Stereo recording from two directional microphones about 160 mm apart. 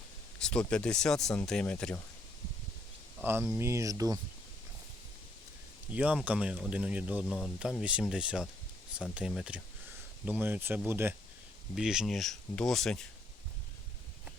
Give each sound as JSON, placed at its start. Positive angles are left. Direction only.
{"t": 0.3, "sound": "a sound", "side_deg": 5}
{"t": 0.7, "sound": "speech", "side_deg": 5}
{"t": 3.6, "sound": "speech", "side_deg": -20}
{"t": 5.9, "sound": "speech", "side_deg": -10}
{"t": 11.7, "sound": "speech", "side_deg": -5}